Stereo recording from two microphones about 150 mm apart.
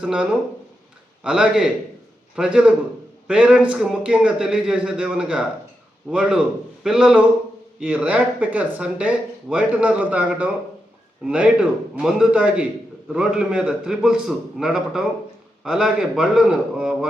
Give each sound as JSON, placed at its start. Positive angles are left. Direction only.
{"t": 0.0, "sound": "a man's voice", "side_deg": -5}